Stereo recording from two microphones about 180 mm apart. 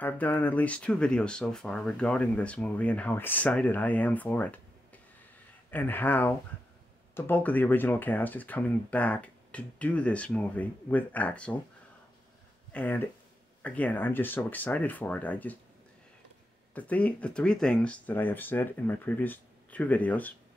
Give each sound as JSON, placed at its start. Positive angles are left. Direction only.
{"t": 0.0, "sound": "speech", "side_deg": 10}
{"t": 12.7, "sound": "speech", "side_deg": 10}
{"t": 16.7, "sound": "speech", "side_deg": 10}